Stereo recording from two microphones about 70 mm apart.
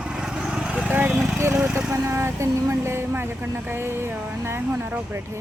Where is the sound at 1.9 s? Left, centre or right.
Right.